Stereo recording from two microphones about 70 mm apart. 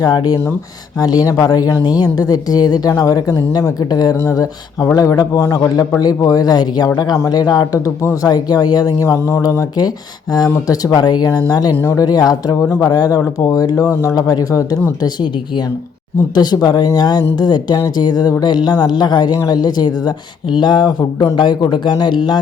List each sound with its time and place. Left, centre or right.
0.0 s speech: left
0.9 s a woman's voice: left
2.9 s speech: left
4.2 s speech: left
4.9 s a woman's voice: left
9.0 s speech: left
10.3 s speech: left
10.9 s a woman's voice: left
12.6 s speech: left
12.9 s speech: left
15.0 s speech: left
16.3 s speech: left